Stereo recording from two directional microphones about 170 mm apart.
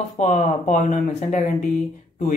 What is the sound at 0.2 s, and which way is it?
Speech, 40° left (ahead or behind).